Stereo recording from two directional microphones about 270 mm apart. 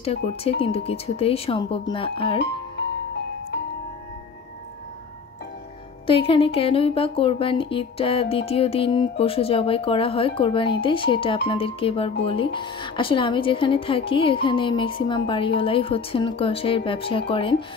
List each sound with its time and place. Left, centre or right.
0.0 s speech: left
6.0 s speech: centre